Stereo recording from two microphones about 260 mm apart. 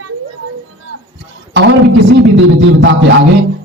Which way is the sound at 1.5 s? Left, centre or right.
Right.